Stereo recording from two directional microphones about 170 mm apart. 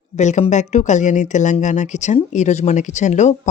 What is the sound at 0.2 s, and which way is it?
Speech, 45° left (ahead or behind).